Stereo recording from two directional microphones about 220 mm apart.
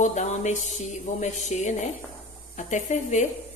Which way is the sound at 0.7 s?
35° left (ahead or behind).